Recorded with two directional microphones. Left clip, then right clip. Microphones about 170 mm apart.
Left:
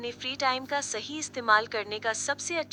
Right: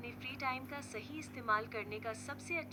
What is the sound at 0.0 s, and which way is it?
A woman's voice, 35° left (ahead or behind).